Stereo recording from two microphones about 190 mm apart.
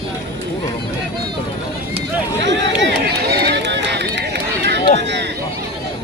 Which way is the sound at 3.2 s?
55° right (ahead or behind).